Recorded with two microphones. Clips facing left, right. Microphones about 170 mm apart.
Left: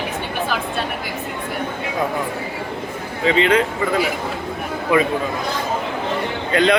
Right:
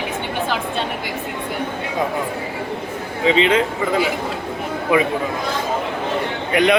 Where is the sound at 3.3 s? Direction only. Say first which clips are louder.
Even; 20° right (ahead or behind).